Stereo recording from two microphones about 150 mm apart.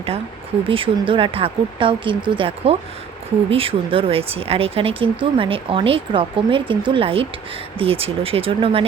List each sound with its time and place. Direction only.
0.7 s speech: 35° right (ahead or behind)